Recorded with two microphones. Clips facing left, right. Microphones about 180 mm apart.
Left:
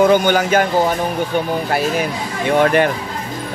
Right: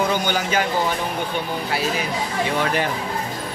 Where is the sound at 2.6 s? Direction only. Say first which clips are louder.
Left 11 dB; 60° left (ahead or behind).